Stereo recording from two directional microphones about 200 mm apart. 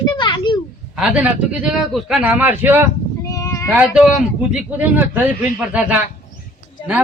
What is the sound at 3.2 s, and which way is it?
Cat, 15° left (ahead or behind).